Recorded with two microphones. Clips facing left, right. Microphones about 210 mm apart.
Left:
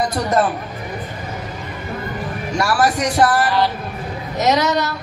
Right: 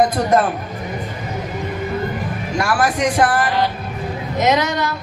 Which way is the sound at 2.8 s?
40° left (ahead or behind).